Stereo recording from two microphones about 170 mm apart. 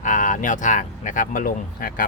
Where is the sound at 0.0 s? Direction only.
50° left (ahead or behind).